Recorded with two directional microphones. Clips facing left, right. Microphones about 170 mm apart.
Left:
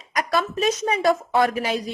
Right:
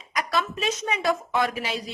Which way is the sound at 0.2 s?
45° left (ahead or behind).